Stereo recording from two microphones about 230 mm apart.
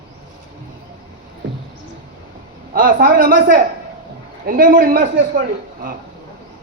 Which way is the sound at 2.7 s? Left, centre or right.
Right.